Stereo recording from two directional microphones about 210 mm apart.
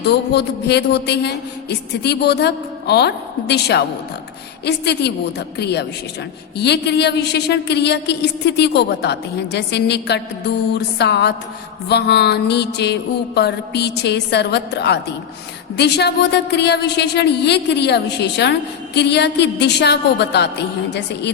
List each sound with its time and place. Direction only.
0.0 s speech: 55° left (ahead or behind)